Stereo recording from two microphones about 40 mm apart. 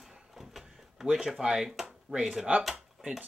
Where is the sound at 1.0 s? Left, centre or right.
Centre.